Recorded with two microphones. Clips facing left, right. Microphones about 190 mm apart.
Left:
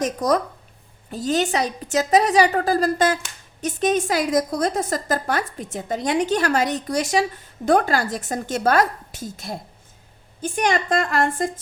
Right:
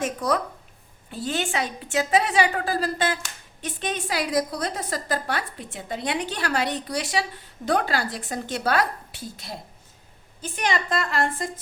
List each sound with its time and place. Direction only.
0.0 s a woman's voice: 40° left (ahead or behind)